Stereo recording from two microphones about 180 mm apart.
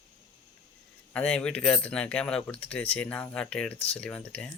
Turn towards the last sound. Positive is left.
turn(degrees=5)  # may be behind; listen again after turning